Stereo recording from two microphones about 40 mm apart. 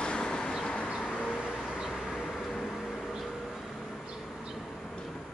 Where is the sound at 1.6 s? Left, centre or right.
Centre.